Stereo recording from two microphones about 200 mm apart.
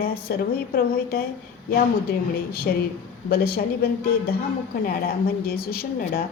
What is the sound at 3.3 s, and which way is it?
A woman's voice, 50° left (ahead or behind).